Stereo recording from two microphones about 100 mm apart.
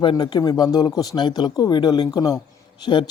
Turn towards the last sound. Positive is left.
turn(degrees=50)  # may be behind; listen again after turning